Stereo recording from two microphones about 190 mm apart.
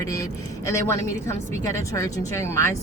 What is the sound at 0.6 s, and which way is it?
A woman's voice, 15° left (ahead or behind).